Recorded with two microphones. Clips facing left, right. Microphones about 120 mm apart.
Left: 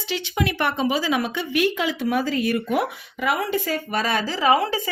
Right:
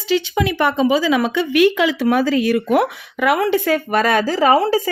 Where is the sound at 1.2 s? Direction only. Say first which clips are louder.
Right 8 dB; 90° right; by 4.8 s 40° right (ahead or behind).